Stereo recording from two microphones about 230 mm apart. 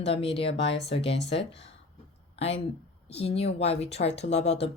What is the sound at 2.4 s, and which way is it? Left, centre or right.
A woman's voice, left.